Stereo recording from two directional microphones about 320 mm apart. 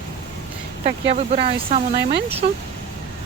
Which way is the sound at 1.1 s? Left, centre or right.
Centre.